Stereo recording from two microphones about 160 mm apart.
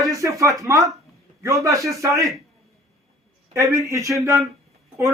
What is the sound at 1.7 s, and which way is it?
Speech, 20° right (ahead or behind).